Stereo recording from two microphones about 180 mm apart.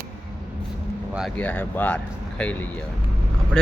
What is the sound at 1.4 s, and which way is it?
Speech, 10° left (ahead or behind).